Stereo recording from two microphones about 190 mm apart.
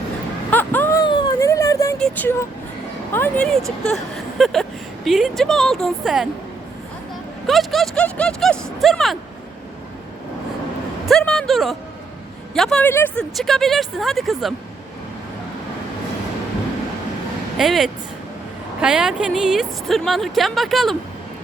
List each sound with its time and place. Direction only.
0.5 s a sound: 10° left (ahead or behind)
2.0 s speech: 10° left (ahead or behind)
7.4 s speech: centre (ahead or behind)
11.0 s speech: 5° left (ahead or behind)
17.6 s speech: centre (ahead or behind)